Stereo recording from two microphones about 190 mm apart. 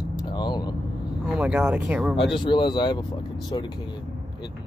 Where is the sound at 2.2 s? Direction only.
25° left (ahead or behind).